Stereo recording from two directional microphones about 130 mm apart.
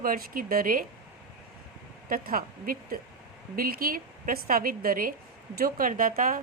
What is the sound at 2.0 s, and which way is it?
A woman's voice, 90° right.